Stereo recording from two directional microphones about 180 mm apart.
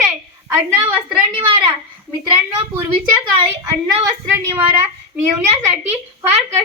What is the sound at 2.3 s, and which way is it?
A woman's voice, 10° right (ahead or behind).